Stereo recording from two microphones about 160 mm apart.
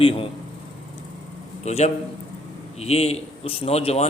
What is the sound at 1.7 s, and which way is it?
A man's voice, 45° left (ahead or behind).